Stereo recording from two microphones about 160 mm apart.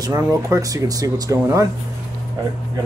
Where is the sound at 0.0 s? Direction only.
20° right (ahead or behind).